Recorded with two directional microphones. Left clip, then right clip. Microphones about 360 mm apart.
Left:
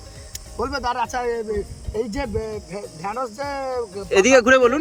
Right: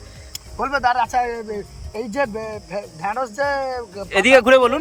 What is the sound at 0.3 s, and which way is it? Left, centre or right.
Speech, centre.